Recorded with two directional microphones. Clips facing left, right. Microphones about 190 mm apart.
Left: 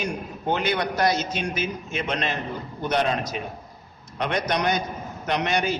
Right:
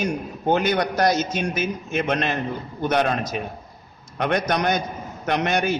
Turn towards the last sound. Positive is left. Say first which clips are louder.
# right 2 dB
turn(degrees=-50)  # may be behind; listen again after turning